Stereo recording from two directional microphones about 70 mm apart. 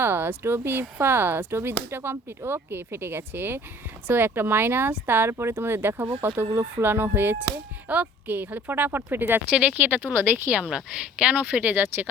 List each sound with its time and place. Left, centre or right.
0.0 s speech: right
9.5 s speech: centre
10.5 s speech: centre